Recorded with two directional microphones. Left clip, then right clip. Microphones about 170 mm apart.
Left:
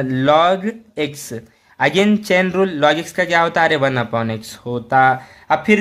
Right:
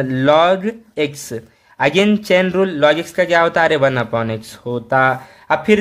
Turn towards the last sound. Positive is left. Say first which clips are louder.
# right 1 dB
turn(degrees=-15)  # may be behind; listen again after turning